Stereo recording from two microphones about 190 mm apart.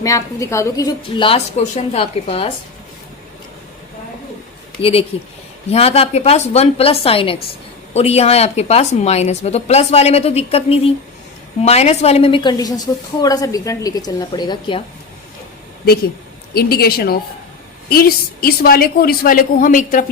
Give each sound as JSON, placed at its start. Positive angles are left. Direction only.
{"t": 0.0, "sound": "a woman's voice", "side_deg": 15}
{"t": 4.8, "sound": "a woman's voice", "side_deg": 30}
{"t": 16.6, "sound": "a woman's voice", "side_deg": 55}